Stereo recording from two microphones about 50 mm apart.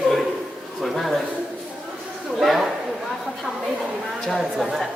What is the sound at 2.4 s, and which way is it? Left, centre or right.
Speech, centre.